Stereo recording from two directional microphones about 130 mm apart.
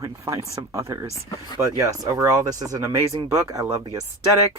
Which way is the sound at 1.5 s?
25° right (ahead or behind).